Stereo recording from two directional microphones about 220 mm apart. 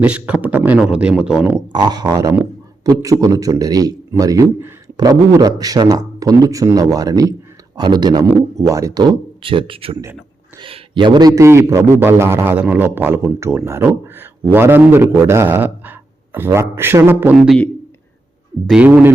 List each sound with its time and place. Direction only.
0.0 s speech: 5° right (ahead or behind)
1.7 s a man's voice: 20° right (ahead or behind); by 17.7 s centre (ahead or behind)
18.7 s a man's voice: 5° right (ahead or behind)